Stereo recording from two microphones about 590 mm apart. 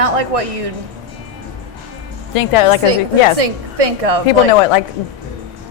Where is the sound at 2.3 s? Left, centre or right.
Left.